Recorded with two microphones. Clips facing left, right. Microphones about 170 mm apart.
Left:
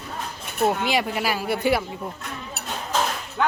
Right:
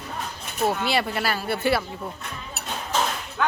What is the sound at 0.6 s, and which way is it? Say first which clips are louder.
Speech: left 1 dB; 15° left (ahead or behind).